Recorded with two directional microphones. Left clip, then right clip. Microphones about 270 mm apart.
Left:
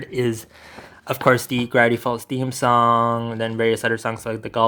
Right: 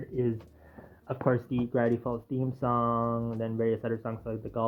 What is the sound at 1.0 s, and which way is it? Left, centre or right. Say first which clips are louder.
Speech: left 12 dB; centre.